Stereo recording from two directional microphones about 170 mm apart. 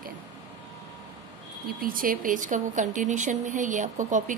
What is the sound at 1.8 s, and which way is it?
Speech, 55° right (ahead or behind).